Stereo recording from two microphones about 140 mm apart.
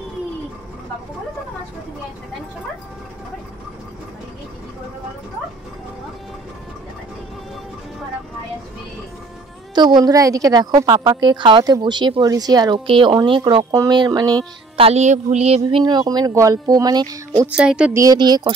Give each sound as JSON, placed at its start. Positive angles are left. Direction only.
{"t": 9.8, "sound": "a woman's voice", "side_deg": -30}
{"t": 14.8, "sound": "speech", "side_deg": -50}
{"t": 15.8, "sound": "a woman's voice", "side_deg": -30}
{"t": 17.5, "sound": "speech", "side_deg": -5}
{"t": 17.9, "sound": "a woman's voice", "side_deg": -30}